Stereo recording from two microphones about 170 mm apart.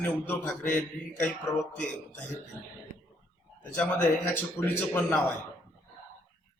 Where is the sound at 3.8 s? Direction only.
10° left (ahead or behind).